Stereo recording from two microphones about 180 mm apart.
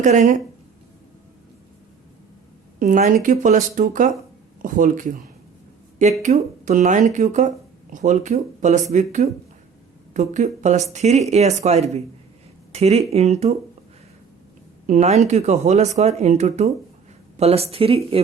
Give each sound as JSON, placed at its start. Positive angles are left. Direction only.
{"t": 0.0, "sound": "speech", "side_deg": -45}
{"t": 2.7, "sound": "a woman's voice", "side_deg": -40}
{"t": 6.2, "sound": "speech", "side_deg": -45}
{"t": 14.8, "sound": "speech", "side_deg": -40}